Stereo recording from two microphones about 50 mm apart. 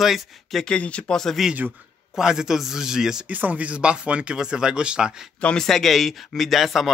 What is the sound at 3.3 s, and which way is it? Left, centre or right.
Speech, right.